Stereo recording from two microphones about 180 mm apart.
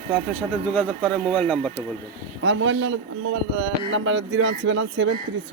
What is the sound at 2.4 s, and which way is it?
Speech, 90° right.